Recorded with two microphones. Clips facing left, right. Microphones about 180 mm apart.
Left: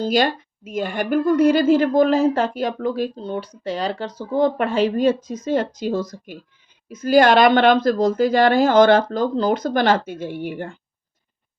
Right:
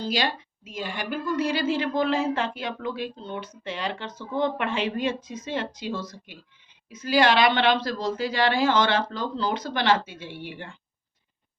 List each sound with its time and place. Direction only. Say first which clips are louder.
0.0 s speech: left 8 dB; 45° left (ahead or behind)